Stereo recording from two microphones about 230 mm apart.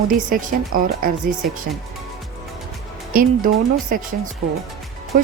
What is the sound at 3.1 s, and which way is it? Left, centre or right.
Speech, right.